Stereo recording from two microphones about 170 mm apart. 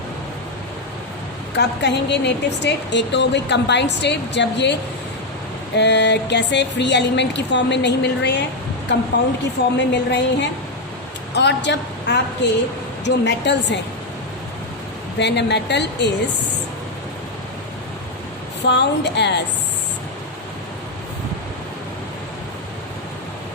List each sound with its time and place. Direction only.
1.5 s a woman's voice: 90° left
5.7 s a woman's voice: 90° left
15.2 s a woman's voice: 90° left
18.6 s a woman's voice: 90° left